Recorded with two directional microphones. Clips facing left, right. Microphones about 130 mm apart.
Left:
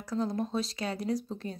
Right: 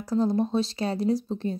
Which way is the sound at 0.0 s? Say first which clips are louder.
Right 7 dB; 35° right (ahead or behind).